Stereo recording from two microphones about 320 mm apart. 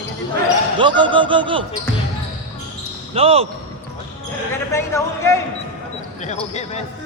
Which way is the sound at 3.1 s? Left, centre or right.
Centre.